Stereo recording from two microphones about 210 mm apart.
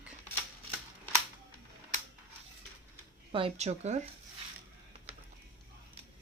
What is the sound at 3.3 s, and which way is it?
Speech, 30° right (ahead or behind).